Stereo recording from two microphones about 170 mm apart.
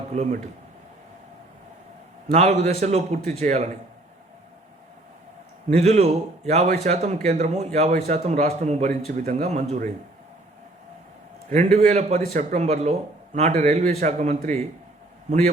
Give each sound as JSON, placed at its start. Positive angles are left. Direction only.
{"t": 0.1, "sound": "a man's voice", "side_deg": -40}
{"t": 2.3, "sound": "a man's voice", "side_deg": -45}
{"t": 5.6, "sound": "a man's voice", "side_deg": -40}
{"t": 11.4, "sound": "a man's voice", "side_deg": -45}